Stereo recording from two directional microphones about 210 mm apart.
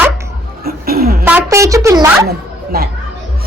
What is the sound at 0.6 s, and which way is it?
Speech, 45° right (ahead or behind).